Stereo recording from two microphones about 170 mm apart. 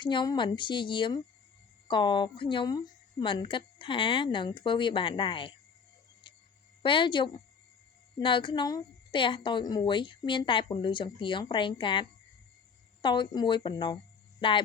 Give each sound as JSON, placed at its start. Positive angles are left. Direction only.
{"t": 0.0, "sound": "a woman's voice", "side_deg": 25}
{"t": 6.2, "sound": "a sound", "side_deg": 30}
{"t": 6.8, "sound": "a woman's voice", "side_deg": 30}